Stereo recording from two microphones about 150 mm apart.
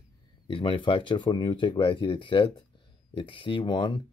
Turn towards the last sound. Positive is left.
turn(degrees=35)  # may be behind; listen again after turning